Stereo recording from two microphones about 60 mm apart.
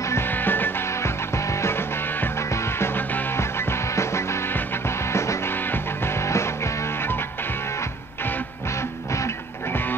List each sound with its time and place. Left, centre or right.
0.3 s music: left
3.9 s music: left